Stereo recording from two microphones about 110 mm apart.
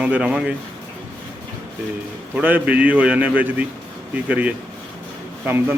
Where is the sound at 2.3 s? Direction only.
15° right (ahead or behind).